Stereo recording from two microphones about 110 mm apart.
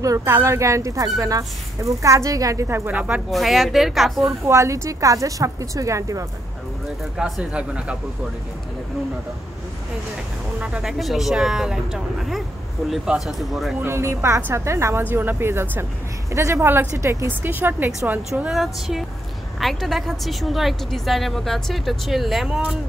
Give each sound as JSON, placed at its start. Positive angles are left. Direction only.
{"t": 0.0, "sound": "a woman's voice", "side_deg": -30}
{"t": 3.3, "sound": "speech", "side_deg": 0}
{"t": 4.2, "sound": "a woman's voice", "side_deg": -25}
{"t": 7.2, "sound": "speech", "side_deg": -5}
{"t": 10.6, "sound": "speech", "side_deg": -5}
{"t": 13.8, "sound": "a woman's voice", "side_deg": -25}
{"t": 18.3, "sound": "speech", "side_deg": -5}